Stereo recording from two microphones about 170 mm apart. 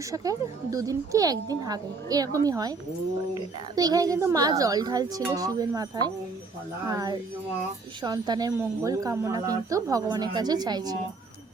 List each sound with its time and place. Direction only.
0.1 s a woman's voice: 20° right (ahead or behind)
3.8 s a woman's voice: 20° right (ahead or behind)